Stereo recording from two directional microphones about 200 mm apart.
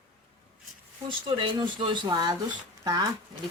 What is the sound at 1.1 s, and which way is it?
Speech, 25° right (ahead or behind).